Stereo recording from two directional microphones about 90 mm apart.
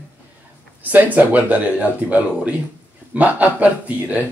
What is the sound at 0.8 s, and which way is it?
Speech, 20° right (ahead or behind).